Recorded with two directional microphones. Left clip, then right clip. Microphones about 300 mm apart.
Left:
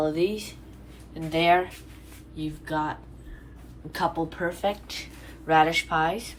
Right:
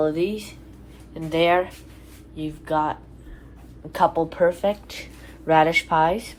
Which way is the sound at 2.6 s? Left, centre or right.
Centre.